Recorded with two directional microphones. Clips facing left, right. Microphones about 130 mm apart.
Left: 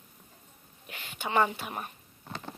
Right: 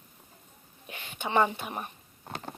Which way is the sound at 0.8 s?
20° right (ahead or behind).